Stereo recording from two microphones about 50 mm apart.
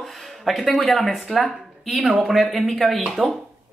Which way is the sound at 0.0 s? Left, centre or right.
Centre.